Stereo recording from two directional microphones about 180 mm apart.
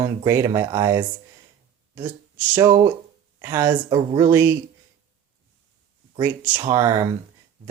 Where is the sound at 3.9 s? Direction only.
25° right (ahead or behind).